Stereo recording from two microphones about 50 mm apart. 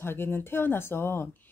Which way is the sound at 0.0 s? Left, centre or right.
Left.